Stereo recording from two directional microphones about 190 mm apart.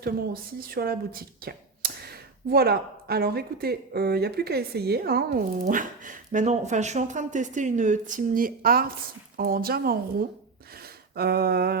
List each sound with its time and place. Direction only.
0.7 s a woman's voice: 50° right (ahead or behind)